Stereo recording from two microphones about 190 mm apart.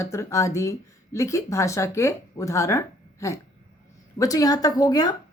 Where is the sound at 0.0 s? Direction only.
15° left (ahead or behind).